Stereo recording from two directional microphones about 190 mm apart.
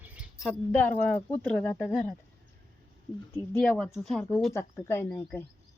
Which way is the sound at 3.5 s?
5° left (ahead or behind).